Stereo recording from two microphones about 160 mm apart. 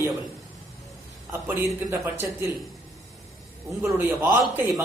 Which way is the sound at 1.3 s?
15° right (ahead or behind).